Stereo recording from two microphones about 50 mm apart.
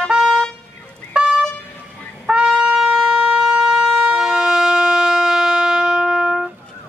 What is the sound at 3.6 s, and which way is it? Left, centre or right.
Vehicle, centre.